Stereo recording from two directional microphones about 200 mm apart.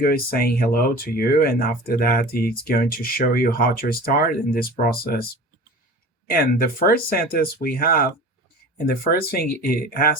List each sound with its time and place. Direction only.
0.0 s speech: 50° left (ahead or behind)
6.2 s speech: 50° left (ahead or behind)
9.3 s speech: 50° left (ahead or behind)